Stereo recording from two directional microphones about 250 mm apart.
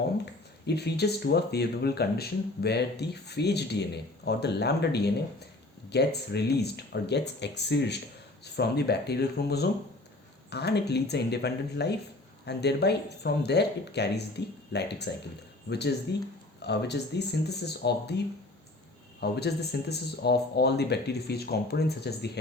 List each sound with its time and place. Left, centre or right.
0.7 s speech: left
16.1 s speech: left
19.2 s speech: left